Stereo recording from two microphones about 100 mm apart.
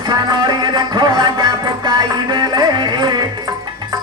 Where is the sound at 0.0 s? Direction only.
45° right (ahead or behind).